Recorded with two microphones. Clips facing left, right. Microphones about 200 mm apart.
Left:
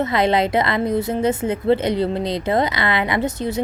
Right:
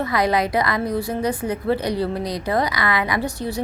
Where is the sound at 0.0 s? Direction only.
25° left (ahead or behind).